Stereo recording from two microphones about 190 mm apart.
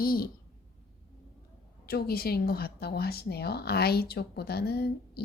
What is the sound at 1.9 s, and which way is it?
A woman's voice, 55° left (ahead or behind).